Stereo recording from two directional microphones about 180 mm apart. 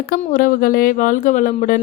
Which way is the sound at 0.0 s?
50° left (ahead or behind).